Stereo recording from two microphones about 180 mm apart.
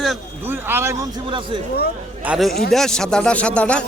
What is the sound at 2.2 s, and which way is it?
A man's voice, centre (ahead or behind).